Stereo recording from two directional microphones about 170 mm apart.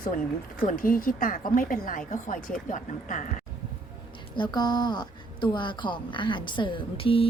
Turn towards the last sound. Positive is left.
turn(degrees=35)  # may be behind; listen again after turning